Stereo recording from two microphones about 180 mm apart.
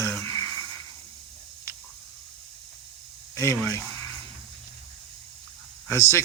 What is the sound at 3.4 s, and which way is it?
Speech, 15° left (ahead or behind).